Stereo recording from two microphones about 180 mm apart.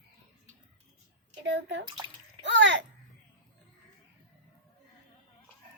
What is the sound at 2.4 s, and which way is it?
Babbling, 90° right.